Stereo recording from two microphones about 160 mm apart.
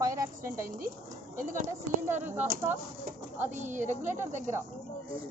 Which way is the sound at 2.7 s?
50° right (ahead or behind).